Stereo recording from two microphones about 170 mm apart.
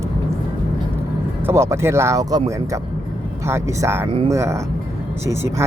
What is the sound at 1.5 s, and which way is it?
Speech, 15° right (ahead or behind).